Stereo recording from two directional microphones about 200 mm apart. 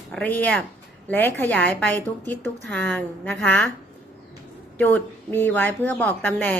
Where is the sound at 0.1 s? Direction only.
5° left (ahead or behind).